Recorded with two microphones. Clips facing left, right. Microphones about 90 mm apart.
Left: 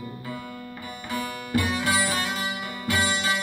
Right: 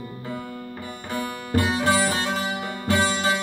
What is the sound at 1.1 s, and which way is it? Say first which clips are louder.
Music: right 1 dB; 35° right (ahead or behind).